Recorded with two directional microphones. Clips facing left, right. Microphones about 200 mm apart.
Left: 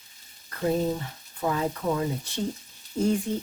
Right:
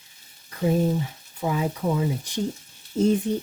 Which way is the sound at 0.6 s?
10° right (ahead or behind).